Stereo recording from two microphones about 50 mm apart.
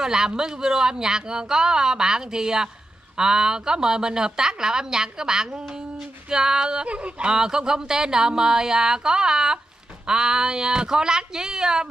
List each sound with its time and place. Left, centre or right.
0.0 s a woman's voice: centre
6.9 s a woman's voice: right